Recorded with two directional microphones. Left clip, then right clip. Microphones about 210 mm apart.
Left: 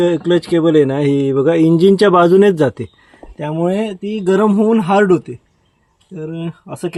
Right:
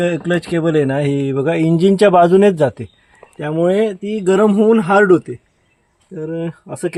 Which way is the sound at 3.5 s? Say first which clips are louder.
Right 4 dB; 10° right (ahead or behind).